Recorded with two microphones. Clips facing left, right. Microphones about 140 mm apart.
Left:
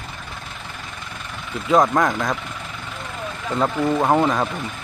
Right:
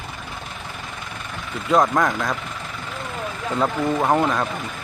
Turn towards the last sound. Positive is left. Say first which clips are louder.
# left 1 dB
turn(degrees=0)  # may be behind; listen again after turning